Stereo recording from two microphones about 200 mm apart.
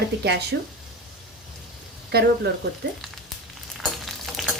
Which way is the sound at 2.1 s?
55° right (ahead or behind).